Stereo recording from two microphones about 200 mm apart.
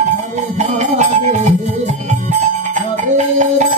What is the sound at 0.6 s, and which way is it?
Music, 35° right (ahead or behind).